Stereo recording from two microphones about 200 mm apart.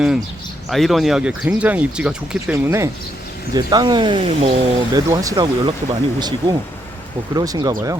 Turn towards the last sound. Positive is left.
turn(degrees=-20)  # may be behind; listen again after turning